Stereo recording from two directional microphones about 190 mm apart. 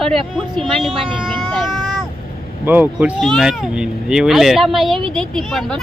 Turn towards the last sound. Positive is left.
turn(degrees=0)  # may be behind; listen again after turning